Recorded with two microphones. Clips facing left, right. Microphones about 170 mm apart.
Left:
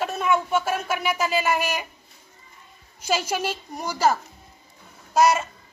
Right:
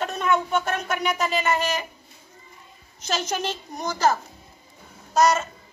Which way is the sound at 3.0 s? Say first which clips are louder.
Left 2 dB; 10° left (ahead or behind).